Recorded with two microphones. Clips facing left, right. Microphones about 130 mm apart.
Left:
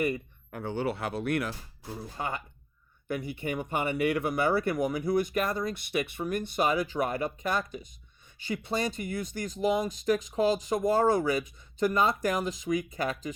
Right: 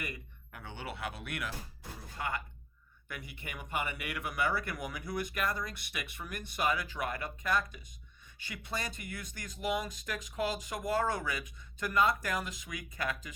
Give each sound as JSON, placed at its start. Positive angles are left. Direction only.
{"t": 0.0, "sound": "speech", "side_deg": 35}
{"t": 2.1, "sound": "speech", "side_deg": 30}